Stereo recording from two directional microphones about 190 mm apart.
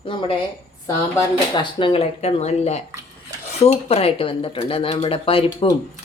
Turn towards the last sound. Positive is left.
turn(degrees=30)  # may be behind; listen again after turning